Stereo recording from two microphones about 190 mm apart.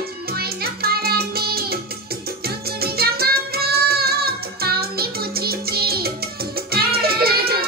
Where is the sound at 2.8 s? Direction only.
55° right (ahead or behind).